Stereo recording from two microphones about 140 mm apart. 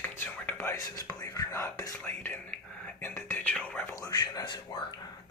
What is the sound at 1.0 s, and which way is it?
Speech, 20° left (ahead or behind).